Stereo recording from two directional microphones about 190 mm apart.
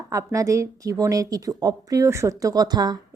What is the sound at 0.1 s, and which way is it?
A woman's voice, 15° right (ahead or behind).